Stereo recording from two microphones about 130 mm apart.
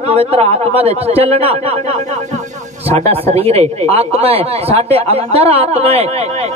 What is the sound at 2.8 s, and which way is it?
Speech, 50° right (ahead or behind).